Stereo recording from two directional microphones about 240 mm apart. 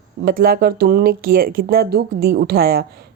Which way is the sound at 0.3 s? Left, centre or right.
Right.